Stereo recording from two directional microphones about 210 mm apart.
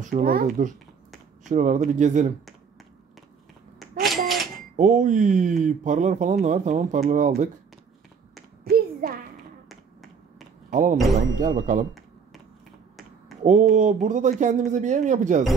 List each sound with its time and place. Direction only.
0.0 s speech: 40° right (ahead or behind)
3.8 s a sound: centre (ahead or behind)
4.7 s speech: 35° right (ahead or behind)
10.7 s speech: 35° right (ahead or behind)
13.4 s speech: 35° right (ahead or behind)